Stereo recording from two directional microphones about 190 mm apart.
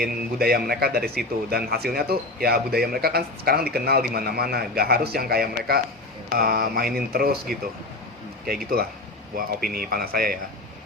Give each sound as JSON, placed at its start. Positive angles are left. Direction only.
{"t": 0.0, "sound": "a man's voice", "side_deg": -55}